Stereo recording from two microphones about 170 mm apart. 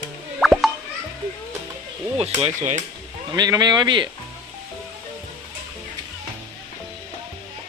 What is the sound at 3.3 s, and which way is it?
Speech, 25° right (ahead or behind).